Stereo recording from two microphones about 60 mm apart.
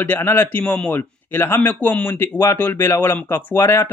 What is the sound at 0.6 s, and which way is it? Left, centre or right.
Speech, centre.